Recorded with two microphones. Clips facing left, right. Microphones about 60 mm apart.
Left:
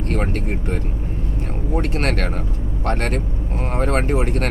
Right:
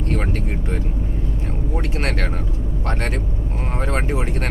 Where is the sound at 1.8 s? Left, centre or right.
Left.